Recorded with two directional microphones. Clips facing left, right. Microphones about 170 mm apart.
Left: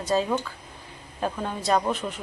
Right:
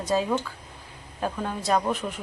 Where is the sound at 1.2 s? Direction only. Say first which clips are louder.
Even; centre (ahead or behind).